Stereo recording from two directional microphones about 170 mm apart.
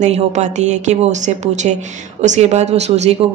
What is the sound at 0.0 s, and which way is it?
A woman's voice, 45° right (ahead or behind).